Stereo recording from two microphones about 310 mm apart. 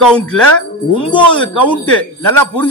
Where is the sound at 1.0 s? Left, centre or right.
Centre.